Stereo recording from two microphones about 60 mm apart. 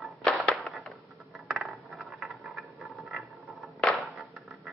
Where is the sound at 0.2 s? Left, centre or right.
Centre.